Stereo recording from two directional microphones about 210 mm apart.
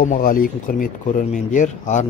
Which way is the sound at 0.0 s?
40° left (ahead or behind).